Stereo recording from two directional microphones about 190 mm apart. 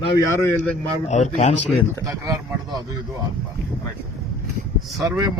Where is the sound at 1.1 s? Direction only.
40° left (ahead or behind).